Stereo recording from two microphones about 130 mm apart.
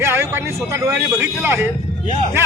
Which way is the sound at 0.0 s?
20° right (ahead or behind).